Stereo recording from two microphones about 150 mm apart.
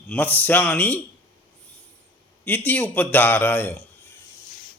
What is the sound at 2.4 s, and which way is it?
A man's voice, 10° left (ahead or behind).